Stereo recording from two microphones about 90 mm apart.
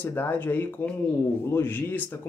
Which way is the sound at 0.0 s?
20° left (ahead or behind).